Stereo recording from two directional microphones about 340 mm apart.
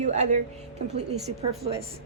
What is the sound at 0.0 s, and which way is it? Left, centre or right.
Speech, centre.